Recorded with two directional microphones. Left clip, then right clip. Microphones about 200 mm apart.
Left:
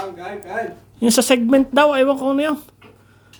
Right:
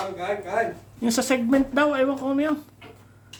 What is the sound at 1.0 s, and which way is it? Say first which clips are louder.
Speech: left 8 dB; 50° left (ahead or behind).